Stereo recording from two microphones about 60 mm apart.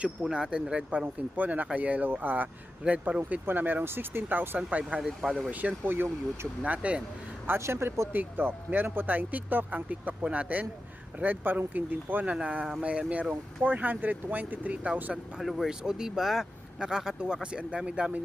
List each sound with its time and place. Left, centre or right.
0.2 s speech: centre
1.0 s speech: right
4.9 s speech: centre
5.5 s speech: right
5.8 s speech: right
6.6 s speech: right
7.6 s speech: right
8.1 s speech: right
12.2 s speech: centre
15.4 s speech: centre